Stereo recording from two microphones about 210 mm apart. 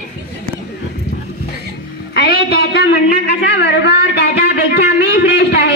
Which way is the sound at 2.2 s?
50° left (ahead or behind).